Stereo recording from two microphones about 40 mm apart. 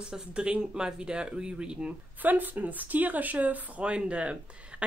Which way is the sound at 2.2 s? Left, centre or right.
Right.